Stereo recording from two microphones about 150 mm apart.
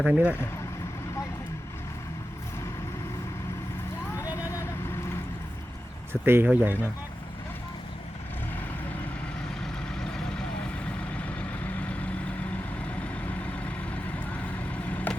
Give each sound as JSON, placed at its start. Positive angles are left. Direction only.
{"t": 0.0, "sound": "speech", "side_deg": -10}
{"t": 4.2, "sound": "vehicle", "side_deg": 20}
{"t": 6.2, "sound": "speech", "side_deg": -15}
{"t": 9.6, "sound": "vehicle", "side_deg": 5}
{"t": 13.2, "sound": "vehicle", "side_deg": 10}
{"t": 14.7, "sound": "vehicle", "side_deg": 10}